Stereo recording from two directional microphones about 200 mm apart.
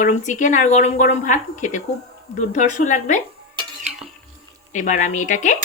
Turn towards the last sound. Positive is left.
turn(degrees=40)  # may be behind; listen again after turning